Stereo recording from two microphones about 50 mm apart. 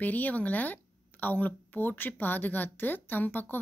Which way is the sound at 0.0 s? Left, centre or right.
Left.